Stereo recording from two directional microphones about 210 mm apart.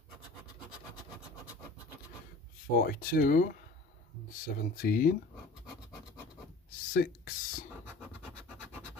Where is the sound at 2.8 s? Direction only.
45° left (ahead or behind).